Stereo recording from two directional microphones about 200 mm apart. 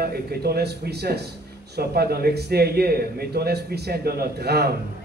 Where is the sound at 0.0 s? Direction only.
50° right (ahead or behind).